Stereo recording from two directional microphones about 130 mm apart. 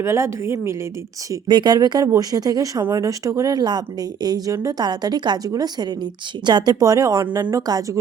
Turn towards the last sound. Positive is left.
turn(degrees=-25)  # may be behind; listen again after turning